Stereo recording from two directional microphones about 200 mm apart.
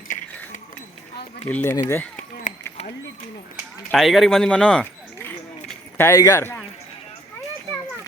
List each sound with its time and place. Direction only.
1.5 s speech: 10° left (ahead or behind)
2.5 s a sound: 35° left (ahead or behind)
3.9 s speech: centre (ahead or behind)